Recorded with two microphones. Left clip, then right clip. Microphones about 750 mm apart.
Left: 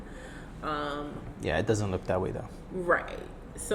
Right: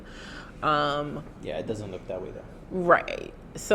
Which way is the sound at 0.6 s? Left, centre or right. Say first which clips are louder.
Right 9 dB; right.